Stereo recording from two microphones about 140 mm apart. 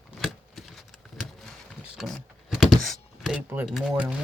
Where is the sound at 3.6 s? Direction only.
5° right (ahead or behind).